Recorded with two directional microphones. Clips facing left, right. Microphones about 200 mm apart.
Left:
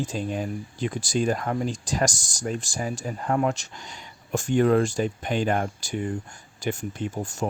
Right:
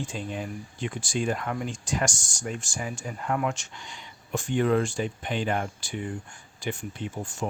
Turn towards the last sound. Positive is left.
turn(degrees=40)  # may be behind; listen again after turning